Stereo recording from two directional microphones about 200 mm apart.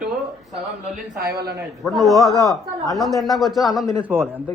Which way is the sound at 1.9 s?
Centre (ahead or behind).